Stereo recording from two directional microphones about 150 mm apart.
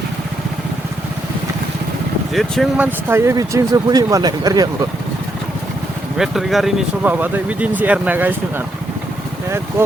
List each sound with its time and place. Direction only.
2.3 s speech: centre (ahead or behind)
2.8 s speech: 15° right (ahead or behind)
6.1 s speech: centre (ahead or behind)